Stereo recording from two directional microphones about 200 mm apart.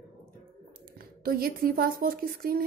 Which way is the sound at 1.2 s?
50° right (ahead or behind).